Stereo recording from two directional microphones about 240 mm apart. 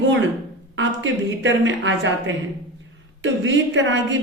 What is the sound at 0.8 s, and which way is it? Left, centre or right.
A woman's voice, right.